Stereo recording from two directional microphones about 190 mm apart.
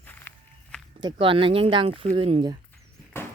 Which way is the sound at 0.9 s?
25° right (ahead or behind).